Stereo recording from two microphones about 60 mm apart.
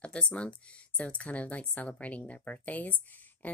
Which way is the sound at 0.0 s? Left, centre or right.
Centre.